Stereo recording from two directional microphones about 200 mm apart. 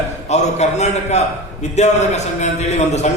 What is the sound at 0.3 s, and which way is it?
A man's voice, 35° left (ahead or behind).